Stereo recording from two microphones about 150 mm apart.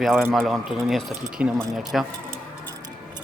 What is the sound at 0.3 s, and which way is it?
Speech, centre (ahead or behind).